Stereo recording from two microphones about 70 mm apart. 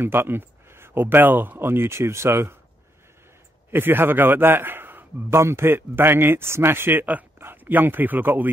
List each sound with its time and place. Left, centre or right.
0.0 s a man's voice: right
3.7 s a man's voice: right